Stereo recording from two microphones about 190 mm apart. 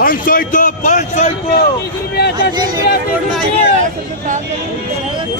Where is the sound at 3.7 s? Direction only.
40° right (ahead or behind).